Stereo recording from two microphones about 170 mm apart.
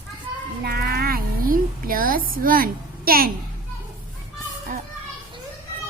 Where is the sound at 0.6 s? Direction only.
65° right (ahead or behind).